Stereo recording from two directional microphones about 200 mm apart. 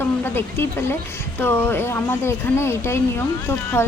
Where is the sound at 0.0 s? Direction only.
10° left (ahead or behind).